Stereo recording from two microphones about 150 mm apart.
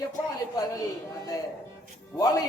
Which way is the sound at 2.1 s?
25° left (ahead or behind).